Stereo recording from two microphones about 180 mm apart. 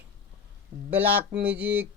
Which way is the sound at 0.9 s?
10° right (ahead or behind).